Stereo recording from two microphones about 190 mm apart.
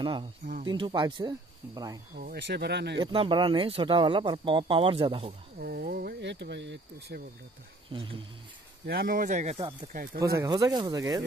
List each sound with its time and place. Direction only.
0.0 s speech: 25° right (ahead or behind)
2.1 s speech: 55° right (ahead or behind)
3.0 s speech: 25° right (ahead or behind)
5.6 s speech: 50° right (ahead or behind)
7.9 s speech: 25° right (ahead or behind)
8.8 s speech: 55° right (ahead or behind); by 9.7 s 35° right (ahead or behind)
10.2 s speech: 15° right (ahead or behind)